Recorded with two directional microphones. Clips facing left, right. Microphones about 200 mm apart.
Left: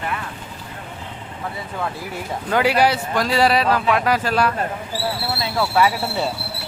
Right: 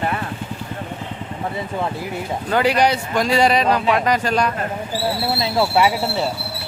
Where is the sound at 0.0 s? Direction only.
40° right (ahead or behind).